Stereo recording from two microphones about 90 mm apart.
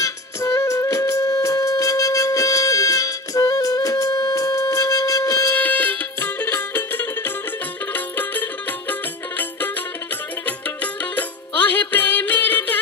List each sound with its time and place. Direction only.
0.0 s music: 35° left (ahead or behind)
5.5 s music: 20° left (ahead or behind)
10.4 s music: 15° left (ahead or behind)